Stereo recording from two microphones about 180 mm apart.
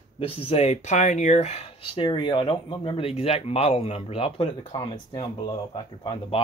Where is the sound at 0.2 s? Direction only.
35° left (ahead or behind).